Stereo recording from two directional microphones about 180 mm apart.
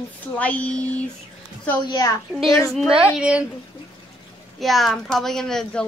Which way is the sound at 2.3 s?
Centre (ahead or behind).